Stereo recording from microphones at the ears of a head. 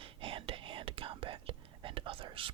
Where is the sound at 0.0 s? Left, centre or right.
Right.